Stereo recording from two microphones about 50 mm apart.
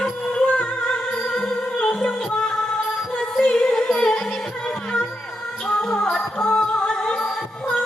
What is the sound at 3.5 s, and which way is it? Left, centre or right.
Music, centre.